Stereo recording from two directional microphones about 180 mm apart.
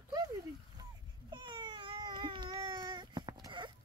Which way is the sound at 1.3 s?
25° right (ahead or behind).